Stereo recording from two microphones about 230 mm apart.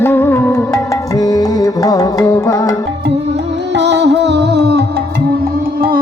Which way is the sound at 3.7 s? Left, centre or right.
Right.